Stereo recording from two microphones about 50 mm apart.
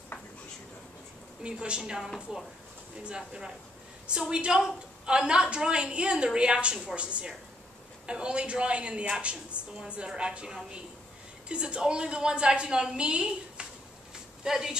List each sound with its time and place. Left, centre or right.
1.4 s a woman's voice: centre
3.2 s a woman's voice: centre